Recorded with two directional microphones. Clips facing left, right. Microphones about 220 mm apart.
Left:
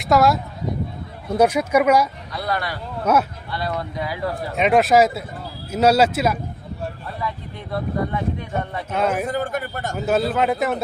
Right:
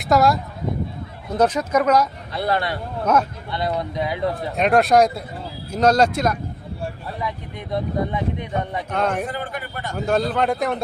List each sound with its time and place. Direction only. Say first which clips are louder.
0.0 s speech: even; centre (ahead or behind)
1.4 s speech: left 2 dB; 10° left (ahead or behind)
2.3 s speech: right 6 dB; 25° right (ahead or behind)
3.0 s speech: even; 10° left (ahead or behind)
3.5 s speech: right 2 dB; 20° right (ahead or behind)
4.5 s speech: left 1 dB; centre (ahead or behind)
7.2 s speech: even; 15° right (ahead or behind)
8.9 s speech: left 2 dB; 5° left (ahead or behind)
9.2 s a man's voice: left 4 dB; 45° left (ahead or behind)
10.1 s speech: left 1 dB; 5° left (ahead or behind)